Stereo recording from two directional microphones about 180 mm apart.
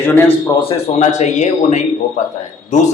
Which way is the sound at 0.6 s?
35° left (ahead or behind).